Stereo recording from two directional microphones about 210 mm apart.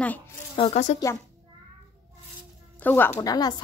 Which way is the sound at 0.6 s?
35° left (ahead or behind).